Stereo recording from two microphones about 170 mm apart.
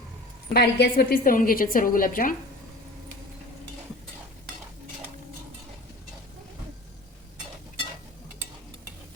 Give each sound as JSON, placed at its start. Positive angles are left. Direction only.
{"t": 0.5, "sound": "a woman's voice", "side_deg": 65}